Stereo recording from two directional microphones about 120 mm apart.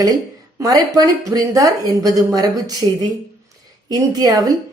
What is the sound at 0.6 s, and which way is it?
Speech, 30° right (ahead or behind).